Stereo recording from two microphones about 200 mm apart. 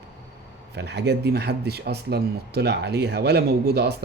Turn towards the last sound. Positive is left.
turn(degrees=-55)  # may be behind; listen again after turning